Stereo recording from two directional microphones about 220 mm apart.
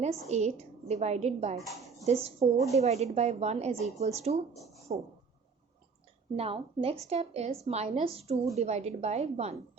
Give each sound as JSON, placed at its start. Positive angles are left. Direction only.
{"t": 0.0, "sound": "a woman's voice", "side_deg": -30}
{"t": 1.5, "sound": "a woman's voice", "side_deg": 0}
{"t": 2.0, "sound": "speech", "side_deg": -30}
{"t": 6.3, "sound": "speech", "side_deg": -25}